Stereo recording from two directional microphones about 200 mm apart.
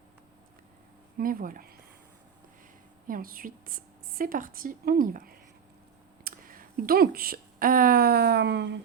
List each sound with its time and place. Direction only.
1.2 s a woman's voice: 45° right (ahead or behind)
3.1 s a woman's voice: 45° right (ahead or behind)